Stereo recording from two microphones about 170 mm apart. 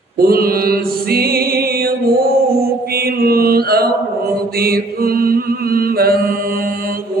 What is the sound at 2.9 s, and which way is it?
Mantra, 65° right (ahead or behind).